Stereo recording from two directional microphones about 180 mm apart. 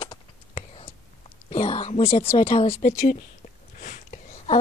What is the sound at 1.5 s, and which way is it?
A woman's voice, 30° left (ahead or behind).